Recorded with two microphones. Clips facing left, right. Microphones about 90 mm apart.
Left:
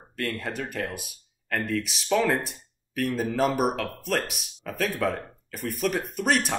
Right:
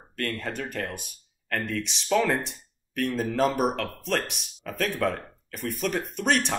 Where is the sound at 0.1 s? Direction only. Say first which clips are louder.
Even; 5° left (ahead or behind).